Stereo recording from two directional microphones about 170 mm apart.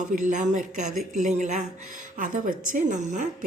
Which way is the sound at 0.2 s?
50° right (ahead or behind).